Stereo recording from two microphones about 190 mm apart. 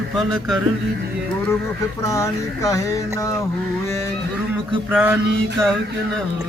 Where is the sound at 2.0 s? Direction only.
15° left (ahead or behind).